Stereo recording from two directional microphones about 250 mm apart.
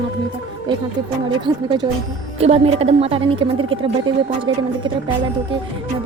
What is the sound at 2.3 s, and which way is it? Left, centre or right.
Speech, right.